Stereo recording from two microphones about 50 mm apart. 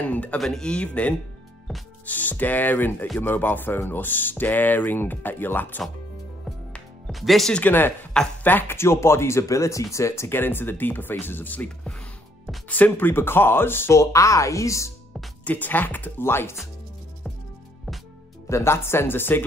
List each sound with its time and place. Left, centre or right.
0.0 s speech: left
0.4 s speech: centre
2.0 s speech: left
7.1 s speech: centre
7.6 s speech: left
8.2 s speech: centre
8.5 s speech: left
8.7 s speech: left
9.9 s speech: left
10.3 s speech: left
13.9 s speech: left
15.4 s speech: left
16.2 s speech: left
18.5 s speech: left